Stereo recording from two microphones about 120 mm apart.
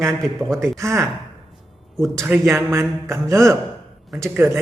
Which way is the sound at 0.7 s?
25° right (ahead or behind).